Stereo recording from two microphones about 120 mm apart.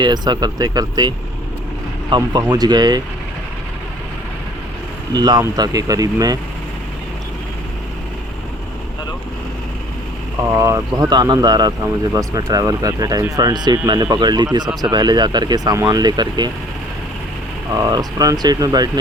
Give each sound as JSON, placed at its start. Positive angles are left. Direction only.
{"t": 0.0, "sound": "speech", "side_deg": -35}
{"t": 5.1, "sound": "speech", "side_deg": -35}
{"t": 10.5, "sound": "speech", "side_deg": -25}
{"t": 17.7, "sound": "speech", "side_deg": -30}